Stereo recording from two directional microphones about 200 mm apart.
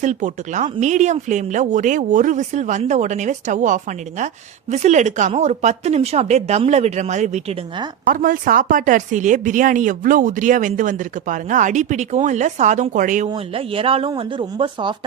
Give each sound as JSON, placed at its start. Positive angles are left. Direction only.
{"t": 0.0, "sound": "speech", "side_deg": -35}
{"t": 13.3, "sound": "speech", "side_deg": -30}